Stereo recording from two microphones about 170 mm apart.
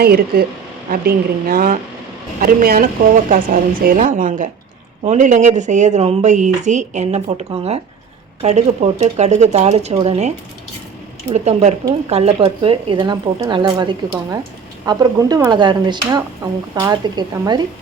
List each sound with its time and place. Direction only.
0.0 s a woman's voice: 65° right (ahead or behind); by 17.6 s 25° right (ahead or behind)